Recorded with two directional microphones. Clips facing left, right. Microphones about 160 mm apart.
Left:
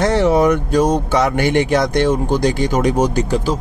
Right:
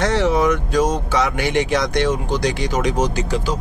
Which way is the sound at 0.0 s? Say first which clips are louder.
Left 4 dB; 50° left (ahead or behind).